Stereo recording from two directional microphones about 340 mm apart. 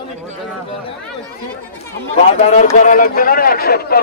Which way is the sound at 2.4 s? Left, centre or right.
Centre.